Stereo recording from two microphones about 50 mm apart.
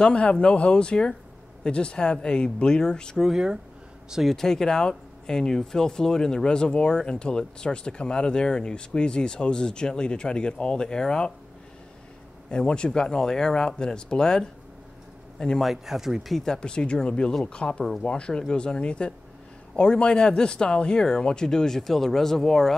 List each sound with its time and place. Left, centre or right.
0.0 s speech: centre
3.3 s speech: centre
4.3 s speech: centre
12.4 s a man's voice: centre
15.6 s speech: centre
16.5 s speech: centre